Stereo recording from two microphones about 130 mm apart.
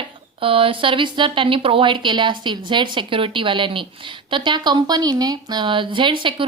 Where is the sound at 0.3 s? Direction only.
45° right (ahead or behind).